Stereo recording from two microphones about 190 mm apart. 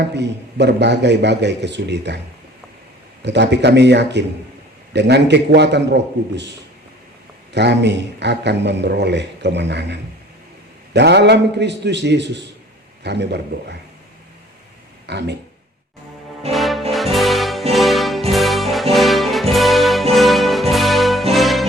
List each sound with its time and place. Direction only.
0.1 s speech: 65° right (ahead or behind)
3.2 s speech: 65° right (ahead or behind)
7.5 s speech: 65° right (ahead or behind)
15.0 s speech: 65° right (ahead or behind)
16.5 s music: centre (ahead or behind)